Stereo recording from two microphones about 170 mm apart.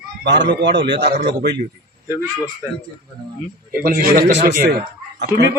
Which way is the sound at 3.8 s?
60° right (ahead or behind).